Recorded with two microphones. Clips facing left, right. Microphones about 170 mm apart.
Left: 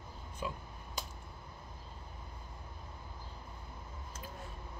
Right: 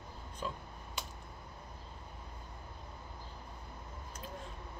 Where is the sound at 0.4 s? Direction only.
10° left (ahead or behind).